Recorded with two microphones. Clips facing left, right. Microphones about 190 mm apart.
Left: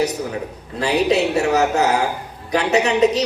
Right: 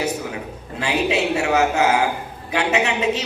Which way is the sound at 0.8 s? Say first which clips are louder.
Left 4 dB; 40° left (ahead or behind).